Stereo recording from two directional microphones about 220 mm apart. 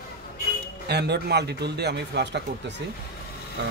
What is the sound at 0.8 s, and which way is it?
A man's voice, 50° right (ahead or behind).